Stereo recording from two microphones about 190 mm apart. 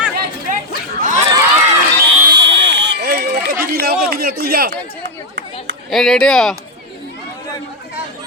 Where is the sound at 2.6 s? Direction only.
70° right (ahead or behind); by 3.5 s 55° right (ahead or behind).